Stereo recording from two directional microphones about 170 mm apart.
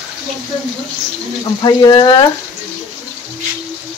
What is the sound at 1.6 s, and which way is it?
Speech, 25° left (ahead or behind).